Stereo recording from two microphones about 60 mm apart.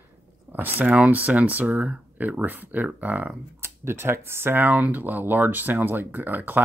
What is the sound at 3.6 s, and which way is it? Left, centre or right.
Speech, right.